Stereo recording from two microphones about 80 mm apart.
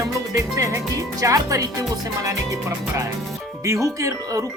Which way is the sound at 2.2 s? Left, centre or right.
Right.